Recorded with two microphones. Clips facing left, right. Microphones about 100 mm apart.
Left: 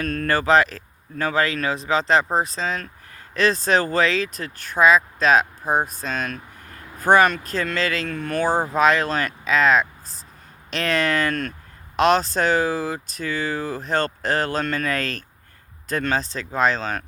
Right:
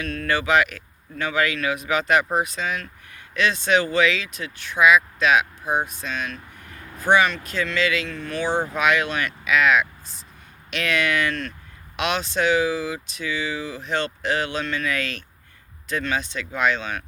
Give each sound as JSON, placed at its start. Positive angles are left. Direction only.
{"t": 0.0, "sound": "speech", "side_deg": 45}